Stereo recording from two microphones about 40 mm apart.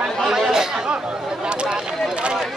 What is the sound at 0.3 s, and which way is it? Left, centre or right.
Chatter, centre.